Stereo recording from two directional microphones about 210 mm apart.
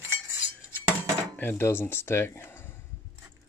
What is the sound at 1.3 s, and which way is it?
Speech, 10° left (ahead or behind).